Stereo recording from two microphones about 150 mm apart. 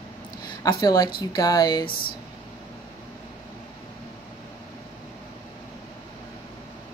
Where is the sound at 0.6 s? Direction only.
25° left (ahead or behind).